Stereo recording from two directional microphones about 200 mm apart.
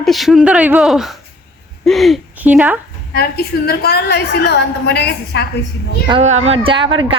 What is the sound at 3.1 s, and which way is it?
A woman's voice, 50° left (ahead or behind).